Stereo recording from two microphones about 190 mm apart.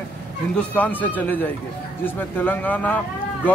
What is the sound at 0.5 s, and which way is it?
Speech, 10° left (ahead or behind).